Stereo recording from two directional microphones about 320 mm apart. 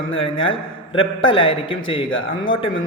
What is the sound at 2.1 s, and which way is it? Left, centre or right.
Speech, left.